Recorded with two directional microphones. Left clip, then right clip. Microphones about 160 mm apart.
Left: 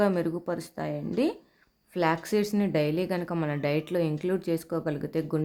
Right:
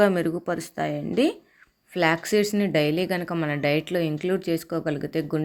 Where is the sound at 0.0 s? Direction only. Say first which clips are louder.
Right 5 dB; 15° right (ahead or behind).